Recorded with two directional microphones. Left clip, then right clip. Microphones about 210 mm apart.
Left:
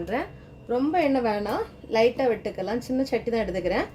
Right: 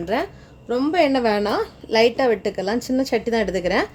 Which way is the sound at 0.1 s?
55° right (ahead or behind).